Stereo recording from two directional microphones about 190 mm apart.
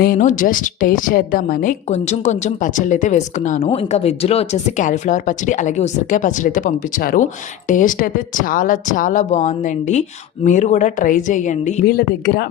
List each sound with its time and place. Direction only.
0.0 s a woman's voice: 45° left (ahead or behind)